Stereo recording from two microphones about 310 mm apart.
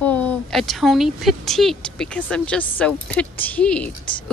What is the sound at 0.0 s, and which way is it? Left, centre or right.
A woman's voice, centre.